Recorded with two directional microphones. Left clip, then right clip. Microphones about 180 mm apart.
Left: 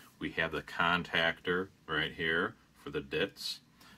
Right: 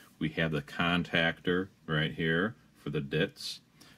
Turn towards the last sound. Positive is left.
turn(degrees=35)  # may be behind; listen again after turning